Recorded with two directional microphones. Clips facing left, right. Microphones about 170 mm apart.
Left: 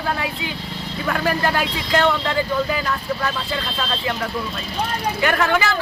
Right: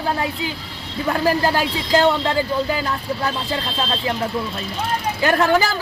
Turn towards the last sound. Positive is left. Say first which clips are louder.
# right 3 dB
turn(degrees=-35)  # may be behind; listen again after turning